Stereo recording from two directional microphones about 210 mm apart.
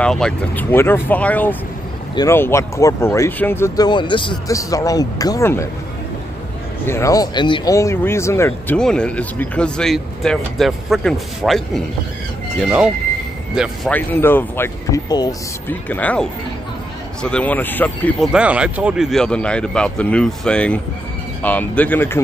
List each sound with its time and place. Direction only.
0.0 s speech: 5° left (ahead or behind)
6.9 s a man's voice: 15° left (ahead or behind)
15.9 s speech: 5° left (ahead or behind)
18.3 s a man's voice: 5° right (ahead or behind)